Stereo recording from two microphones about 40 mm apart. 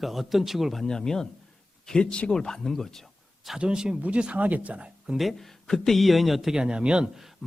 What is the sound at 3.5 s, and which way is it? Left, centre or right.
A man's voice, right.